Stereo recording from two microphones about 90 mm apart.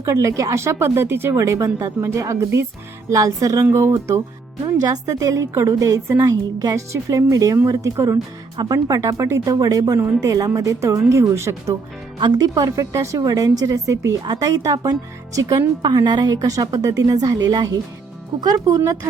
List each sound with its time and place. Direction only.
0.0 s a woman's voice: 35° right (ahead or behind)
1.4 s a woman's voice: 35° right (ahead or behind)
4.6 s a woman's voice: 45° right (ahead or behind)
12.2 s a woman's voice: 45° right (ahead or behind)